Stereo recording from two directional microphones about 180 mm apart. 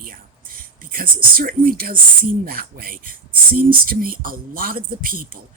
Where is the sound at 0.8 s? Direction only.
55° right (ahead or behind).